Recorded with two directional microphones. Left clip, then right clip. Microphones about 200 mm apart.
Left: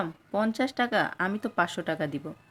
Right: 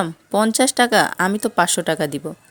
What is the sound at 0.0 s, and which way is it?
Speech, 50° right (ahead or behind).